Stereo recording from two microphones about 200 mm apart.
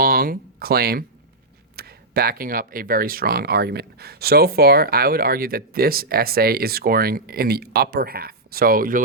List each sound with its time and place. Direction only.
0.0 s speech: 45° right (ahead or behind)